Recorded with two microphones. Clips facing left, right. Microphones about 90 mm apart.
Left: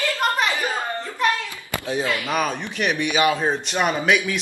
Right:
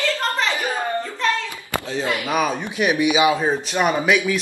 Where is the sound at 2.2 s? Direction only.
5° right (ahead or behind).